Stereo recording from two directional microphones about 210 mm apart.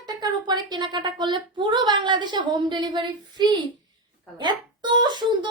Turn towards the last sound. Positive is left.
turn(degrees=-20)  # may be behind; listen again after turning